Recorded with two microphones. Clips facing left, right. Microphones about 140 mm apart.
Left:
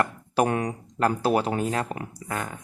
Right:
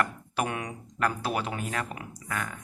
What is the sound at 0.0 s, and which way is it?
A man's voice, 40° left (ahead or behind).